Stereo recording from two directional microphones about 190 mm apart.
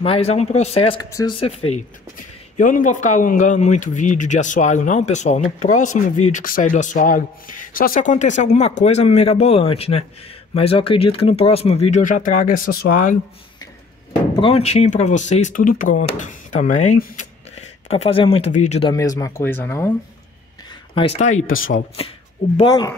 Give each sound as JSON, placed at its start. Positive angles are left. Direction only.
{"t": 0.0, "sound": "speech", "side_deg": 30}
{"t": 2.1, "sound": "speech", "side_deg": 45}
{"t": 14.3, "sound": "speech", "side_deg": 30}
{"t": 18.9, "sound": "speech", "side_deg": 20}
{"t": 20.9, "sound": "speech", "side_deg": 30}
{"t": 21.5, "sound": "speech", "side_deg": 90}
{"t": 21.7, "sound": "speech", "side_deg": 30}
{"t": 22.6, "sound": "speech", "side_deg": 20}